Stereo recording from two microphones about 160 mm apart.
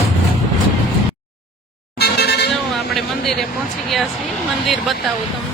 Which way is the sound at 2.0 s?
90° left.